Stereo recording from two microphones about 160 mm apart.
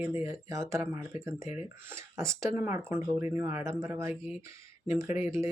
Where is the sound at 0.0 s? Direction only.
20° right (ahead or behind).